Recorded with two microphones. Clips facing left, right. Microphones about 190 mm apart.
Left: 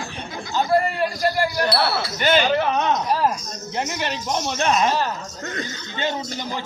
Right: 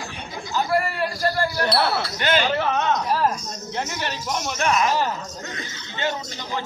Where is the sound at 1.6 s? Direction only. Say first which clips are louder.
Even; 5° left (ahead or behind).